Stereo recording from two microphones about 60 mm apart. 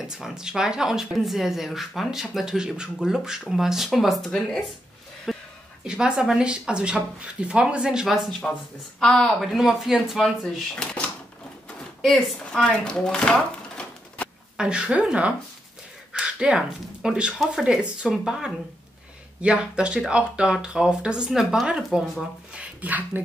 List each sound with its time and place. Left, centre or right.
0.1 s speech: centre
4.3 s a woman's voice: centre
5.3 s a sound: centre
5.9 s speech: centre
8.4 s speech: centre
9.0 s a woman's voice: centre
9.4 s speech: centre
10.8 s cash register: centre
12.0 s speech: centre
13.0 s a sound: centre
14.6 s speech: centre
22.5 s speech: right